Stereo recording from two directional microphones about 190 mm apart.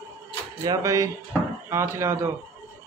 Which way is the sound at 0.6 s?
20° right (ahead or behind).